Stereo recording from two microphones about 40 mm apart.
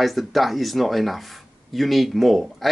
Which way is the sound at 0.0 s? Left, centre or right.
Centre.